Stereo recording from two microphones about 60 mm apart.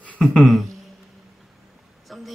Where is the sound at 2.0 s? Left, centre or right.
Centre.